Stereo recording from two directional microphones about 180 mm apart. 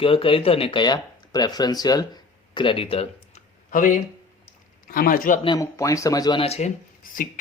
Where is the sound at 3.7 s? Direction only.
45° left (ahead or behind).